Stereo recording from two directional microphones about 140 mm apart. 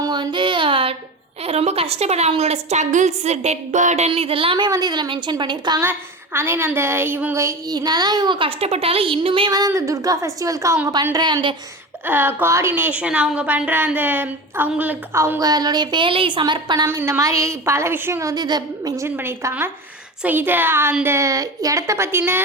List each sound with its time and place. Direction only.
0.0 s a sound: 30° right (ahead or behind)
1.5 s a woman's voice: 45° right (ahead or behind)
5.8 s a woman's voice: 15° right (ahead or behind); by 9.5 s 40° right (ahead or behind)
9.5 s a woman's voice: 25° right (ahead or behind)
12.0 s a woman's voice: 15° right (ahead or behind); by 16.8 s 30° right (ahead or behind)
16.8 s a woman's voice: 20° right (ahead or behind)